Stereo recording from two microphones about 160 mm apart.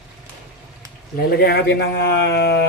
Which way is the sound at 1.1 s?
85° left.